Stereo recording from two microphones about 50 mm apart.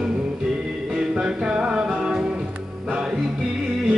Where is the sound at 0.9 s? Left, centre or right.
Centre.